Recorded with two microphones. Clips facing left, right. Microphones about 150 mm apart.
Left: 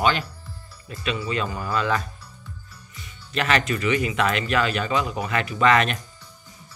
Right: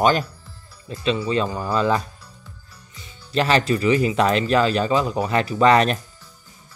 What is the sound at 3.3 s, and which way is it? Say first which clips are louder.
Speech: right 4 dB; 30° right (ahead or behind).